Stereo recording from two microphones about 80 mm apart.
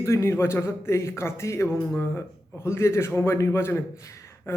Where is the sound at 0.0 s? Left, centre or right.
Left.